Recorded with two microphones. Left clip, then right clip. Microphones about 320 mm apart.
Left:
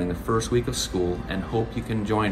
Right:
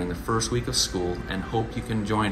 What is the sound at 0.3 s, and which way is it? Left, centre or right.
Speech, centre.